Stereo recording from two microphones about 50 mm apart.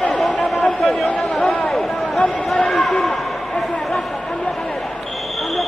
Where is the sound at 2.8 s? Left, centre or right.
Centre.